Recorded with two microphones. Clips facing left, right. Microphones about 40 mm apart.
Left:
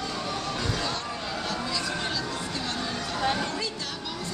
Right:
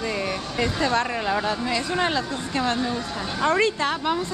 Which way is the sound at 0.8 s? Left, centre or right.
Right.